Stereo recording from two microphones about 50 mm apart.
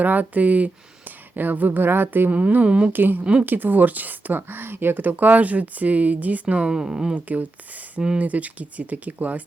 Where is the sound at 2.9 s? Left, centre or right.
Right; by 7.1 s centre.